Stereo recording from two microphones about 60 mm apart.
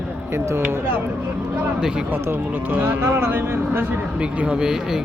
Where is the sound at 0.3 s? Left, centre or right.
Right.